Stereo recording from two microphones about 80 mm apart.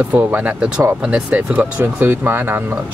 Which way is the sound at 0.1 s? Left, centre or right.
Centre.